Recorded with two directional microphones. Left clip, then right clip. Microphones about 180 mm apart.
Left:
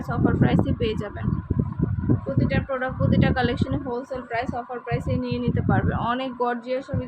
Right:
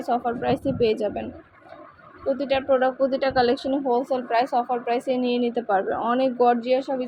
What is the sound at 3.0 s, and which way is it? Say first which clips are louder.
Speech: right 3 dB; centre (ahead or behind).